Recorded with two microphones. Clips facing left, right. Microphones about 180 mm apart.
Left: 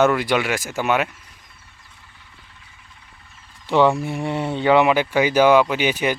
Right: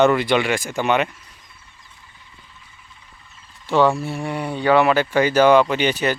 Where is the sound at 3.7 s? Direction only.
20° left (ahead or behind).